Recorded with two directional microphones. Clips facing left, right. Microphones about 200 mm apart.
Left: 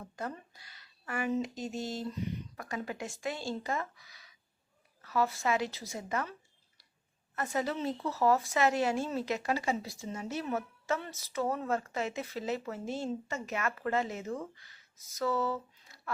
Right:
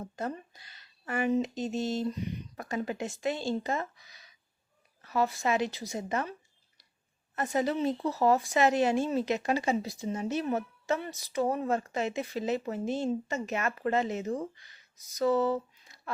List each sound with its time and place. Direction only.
0.0 s speech: 25° right (ahead or behind)
7.3 s speech: 20° right (ahead or behind)